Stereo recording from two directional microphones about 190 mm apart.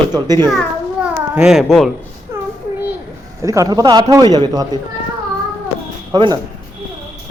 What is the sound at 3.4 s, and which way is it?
A man's voice, 15° right (ahead or behind).